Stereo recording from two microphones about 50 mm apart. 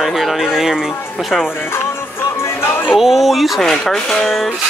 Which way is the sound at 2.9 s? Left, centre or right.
Centre.